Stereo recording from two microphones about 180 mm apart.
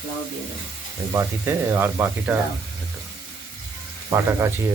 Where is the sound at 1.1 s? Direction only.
15° right (ahead or behind).